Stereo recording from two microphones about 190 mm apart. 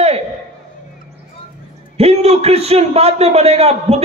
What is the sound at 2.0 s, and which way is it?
A man's voice, 35° right (ahead or behind).